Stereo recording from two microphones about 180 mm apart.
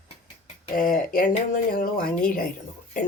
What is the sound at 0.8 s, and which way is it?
Speech, 50° left (ahead or behind).